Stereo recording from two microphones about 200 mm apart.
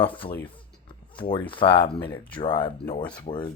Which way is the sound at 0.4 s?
25° left (ahead or behind).